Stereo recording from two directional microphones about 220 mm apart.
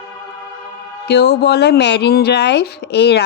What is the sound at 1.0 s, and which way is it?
Speech, 45° left (ahead or behind).